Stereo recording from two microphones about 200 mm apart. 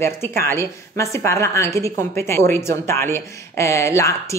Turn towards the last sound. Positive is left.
turn(degrees=15)  # may be behind; listen again after turning